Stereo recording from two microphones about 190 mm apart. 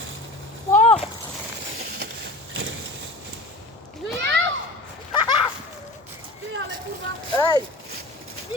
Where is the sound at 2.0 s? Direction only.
65° right (ahead or behind).